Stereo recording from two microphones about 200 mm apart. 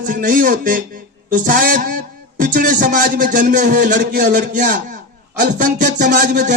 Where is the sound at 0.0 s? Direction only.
45° right (ahead or behind).